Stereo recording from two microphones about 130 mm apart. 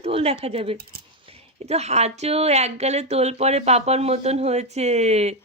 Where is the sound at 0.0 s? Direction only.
50° right (ahead or behind).